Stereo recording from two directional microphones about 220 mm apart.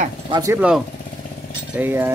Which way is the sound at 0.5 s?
5° right (ahead or behind).